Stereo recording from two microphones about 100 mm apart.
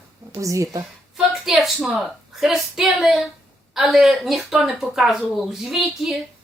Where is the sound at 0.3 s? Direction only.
30° right (ahead or behind).